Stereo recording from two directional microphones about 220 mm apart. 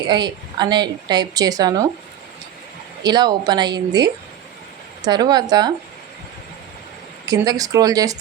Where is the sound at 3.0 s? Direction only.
20° right (ahead or behind).